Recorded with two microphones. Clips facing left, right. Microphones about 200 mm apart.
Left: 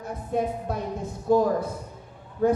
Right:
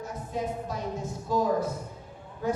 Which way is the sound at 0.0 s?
55° left (ahead or behind).